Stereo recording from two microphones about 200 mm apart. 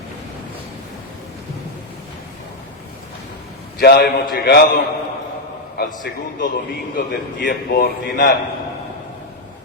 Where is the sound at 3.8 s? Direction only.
50° left (ahead or behind).